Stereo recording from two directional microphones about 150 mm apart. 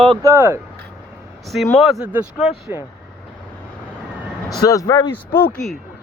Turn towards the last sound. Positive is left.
turn(degrees=30)  # may be behind; listen again after turning